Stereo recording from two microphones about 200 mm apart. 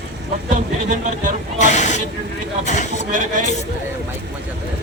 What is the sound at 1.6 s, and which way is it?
Speech, 35° left (ahead or behind).